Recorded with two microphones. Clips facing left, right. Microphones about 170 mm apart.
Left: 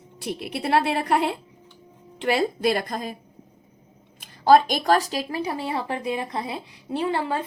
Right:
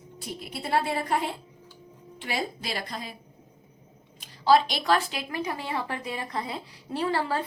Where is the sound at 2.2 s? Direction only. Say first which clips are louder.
Left 10 dB; 60° left (ahead or behind).